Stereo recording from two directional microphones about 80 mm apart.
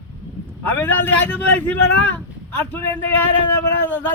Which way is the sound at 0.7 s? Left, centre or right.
Left.